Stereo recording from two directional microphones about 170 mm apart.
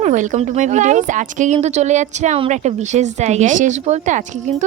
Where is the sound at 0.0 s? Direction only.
45° right (ahead or behind).